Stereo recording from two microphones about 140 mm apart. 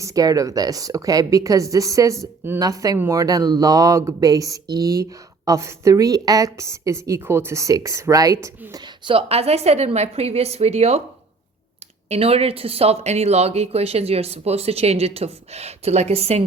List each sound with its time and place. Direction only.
0.0 s a woman's voice: 25° right (ahead or behind)
9.0 s speech: 45° right (ahead or behind)
12.0 s speech: 45° right (ahead or behind)